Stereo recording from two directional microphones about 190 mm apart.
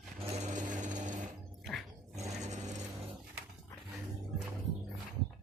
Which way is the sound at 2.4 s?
40° right (ahead or behind).